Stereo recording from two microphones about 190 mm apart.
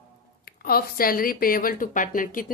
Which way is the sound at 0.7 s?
50° left (ahead or behind).